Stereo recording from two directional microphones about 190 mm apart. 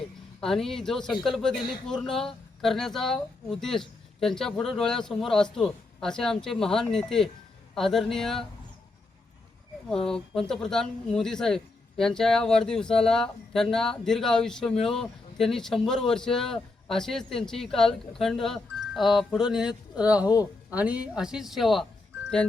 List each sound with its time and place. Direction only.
0.3 s speech: centre (ahead or behind)
9.9 s speech: 5° left (ahead or behind)
20.2 s speech: 20° left (ahead or behind)
20.7 s speech: 5° right (ahead or behind)